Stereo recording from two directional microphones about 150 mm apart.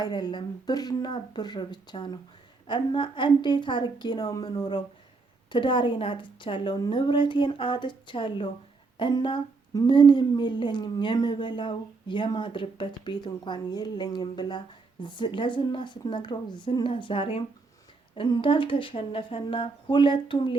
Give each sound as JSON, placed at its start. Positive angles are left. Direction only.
{"t": 0.0, "sound": "a woman's voice", "side_deg": 30}